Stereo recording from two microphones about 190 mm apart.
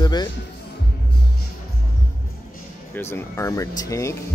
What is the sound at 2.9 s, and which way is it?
Speech, 15° left (ahead or behind).